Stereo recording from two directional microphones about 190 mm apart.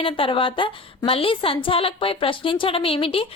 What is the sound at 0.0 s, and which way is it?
A woman's voice, 30° left (ahead or behind).